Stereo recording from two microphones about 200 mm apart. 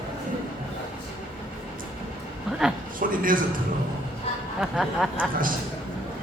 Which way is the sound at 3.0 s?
45° right (ahead or behind).